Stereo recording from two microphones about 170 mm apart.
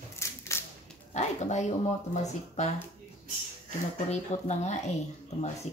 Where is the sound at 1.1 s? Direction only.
40° left (ahead or behind).